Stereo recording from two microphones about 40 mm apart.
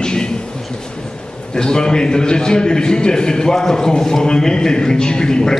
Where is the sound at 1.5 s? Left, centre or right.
Centre.